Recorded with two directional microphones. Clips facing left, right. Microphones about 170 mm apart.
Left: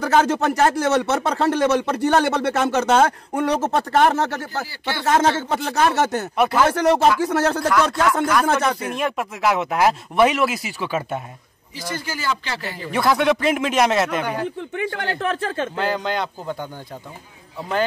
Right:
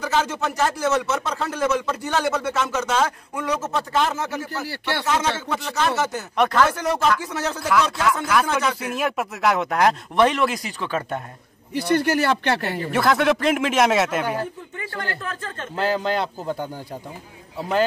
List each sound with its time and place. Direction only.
0.0 s speech: 55° left (ahead or behind)
5.0 s speech: 55° left (ahead or behind)
6.3 s speech: 5° left (ahead or behind)
6.7 s speech: 70° left (ahead or behind)
8.5 s speech: 50° left (ahead or behind)
8.9 s speech: 5° right (ahead or behind)
11.7 s speech: 65° right (ahead or behind)
12.9 s speech: centre (ahead or behind)
15.0 s speech: 80° left
15.7 s speech: centre (ahead or behind)